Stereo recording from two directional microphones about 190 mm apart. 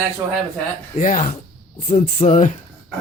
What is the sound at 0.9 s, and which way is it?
Speech, 45° left (ahead or behind).